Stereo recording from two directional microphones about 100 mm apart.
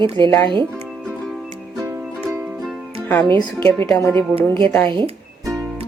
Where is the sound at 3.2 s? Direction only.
50° right (ahead or behind).